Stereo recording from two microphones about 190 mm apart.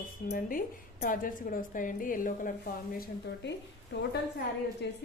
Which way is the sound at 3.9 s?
70° left (ahead or behind).